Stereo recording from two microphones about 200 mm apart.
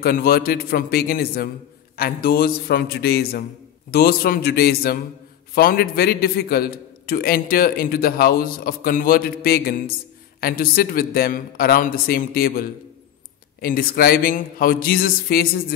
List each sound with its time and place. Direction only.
0.0 s a man's voice: 50° left (ahead or behind)